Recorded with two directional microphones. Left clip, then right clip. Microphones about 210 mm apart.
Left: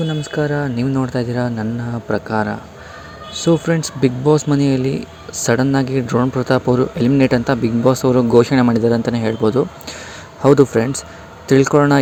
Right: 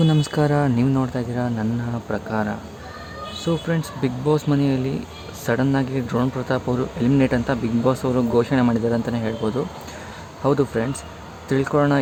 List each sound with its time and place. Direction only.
0.1 s speech: centre (ahead or behind)
0.9 s speech: 10° left (ahead or behind)